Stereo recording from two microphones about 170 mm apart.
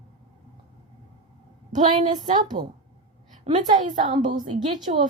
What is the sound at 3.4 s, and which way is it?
Speech, 45° right (ahead or behind).